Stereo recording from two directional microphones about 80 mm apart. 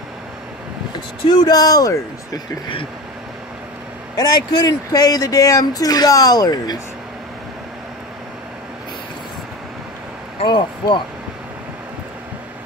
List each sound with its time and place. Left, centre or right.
1.2 s speech: left
4.2 s speech: left
10.4 s speech: left